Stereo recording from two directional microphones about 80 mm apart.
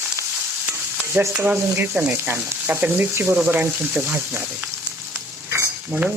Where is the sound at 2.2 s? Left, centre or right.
Right.